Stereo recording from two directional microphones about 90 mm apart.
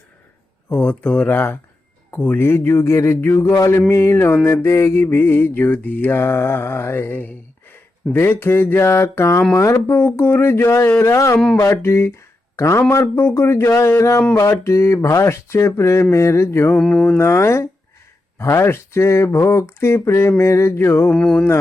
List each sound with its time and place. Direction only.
0.7 s speech: 15° left (ahead or behind)
2.0 s mantra: 20° left (ahead or behind)
11.6 s a man's voice: 30° left (ahead or behind)
12.9 s mantra: 30° left (ahead or behind)
13.7 s speech: 35° left (ahead or behind)
16.7 s speech: 5° left (ahead or behind)
17.2 s speech: 30° left (ahead or behind)
18.3 s mantra: 30° left (ahead or behind)
21.1 s speech: 10° left (ahead or behind)